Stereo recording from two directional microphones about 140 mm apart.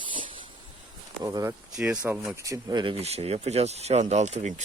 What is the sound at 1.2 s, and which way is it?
Speech, 25° right (ahead or behind).